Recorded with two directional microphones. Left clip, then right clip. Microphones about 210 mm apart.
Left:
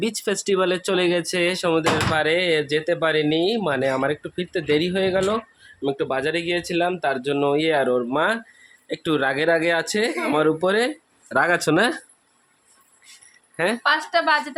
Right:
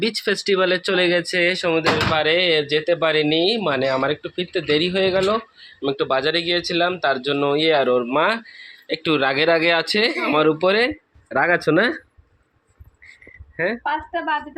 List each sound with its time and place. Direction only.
0.0 s speech: 15° left (ahead or behind)
13.6 s speech: 15° left (ahead or behind)